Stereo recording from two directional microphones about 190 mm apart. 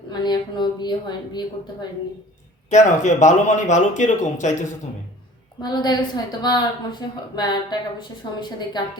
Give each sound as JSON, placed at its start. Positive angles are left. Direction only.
{"t": 0.1, "sound": "a woman's voice", "side_deg": 20}
{"t": 2.6, "sound": "speech", "side_deg": 40}
{"t": 5.6, "sound": "a woman's voice", "side_deg": 20}